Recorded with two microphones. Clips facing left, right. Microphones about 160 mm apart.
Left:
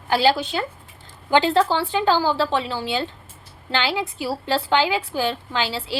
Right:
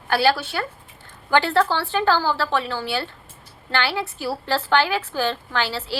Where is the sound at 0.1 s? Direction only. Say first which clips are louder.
Left 1 dB; 15° left (ahead or behind).